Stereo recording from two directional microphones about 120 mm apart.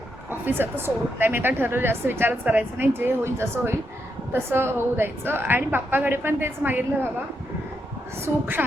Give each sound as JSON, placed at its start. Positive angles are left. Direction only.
{"t": 0.3, "sound": "a woman's voice", "side_deg": -15}
{"t": 8.2, "sound": "a woman's voice", "side_deg": -15}